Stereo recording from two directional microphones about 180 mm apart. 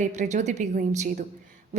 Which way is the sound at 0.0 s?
40° right (ahead or behind).